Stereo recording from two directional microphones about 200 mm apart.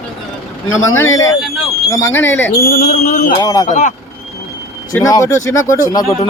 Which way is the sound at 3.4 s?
15° left (ahead or behind).